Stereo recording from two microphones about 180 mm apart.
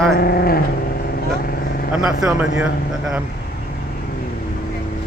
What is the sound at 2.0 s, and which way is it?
Speech, 5° right (ahead or behind).